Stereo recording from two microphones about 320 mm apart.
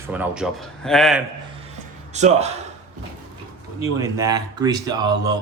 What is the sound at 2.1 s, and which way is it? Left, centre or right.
Speech, right.